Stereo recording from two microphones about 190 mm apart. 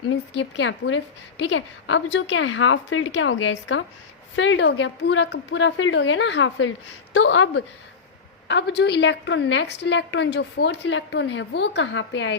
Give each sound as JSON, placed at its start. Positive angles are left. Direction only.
{"t": 0.3, "sound": "a woman's voice", "side_deg": 75}
{"t": 4.4, "sound": "a woman's voice", "side_deg": 75}
{"t": 8.4, "sound": "a woman's voice", "side_deg": 65}